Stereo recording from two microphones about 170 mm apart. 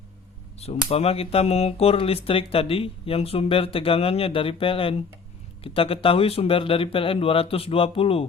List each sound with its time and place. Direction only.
0.9 s speech: 35° left (ahead or behind)